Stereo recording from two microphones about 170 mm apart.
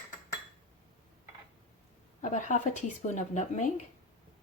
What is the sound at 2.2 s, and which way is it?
Speech, 45° left (ahead or behind).